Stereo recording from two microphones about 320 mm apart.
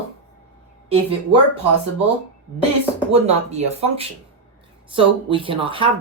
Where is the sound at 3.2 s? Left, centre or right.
Centre.